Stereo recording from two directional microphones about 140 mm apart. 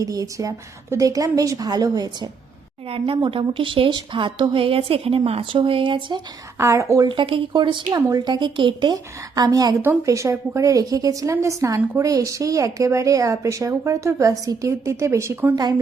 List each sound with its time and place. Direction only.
0.0 s a woman's voice: 25° right (ahead or behind)
2.9 s a woman's voice: 40° right (ahead or behind)
6.6 s a woman's voice: 20° right (ahead or behind)
7.1 s a woman's voice: 40° right (ahead or behind); by 15.5 s 20° right (ahead or behind)